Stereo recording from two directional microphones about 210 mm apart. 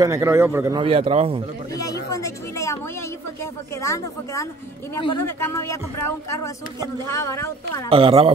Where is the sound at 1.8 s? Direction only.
15° left (ahead or behind).